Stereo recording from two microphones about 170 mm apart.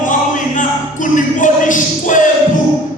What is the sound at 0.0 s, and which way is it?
Music, 50° left (ahead or behind).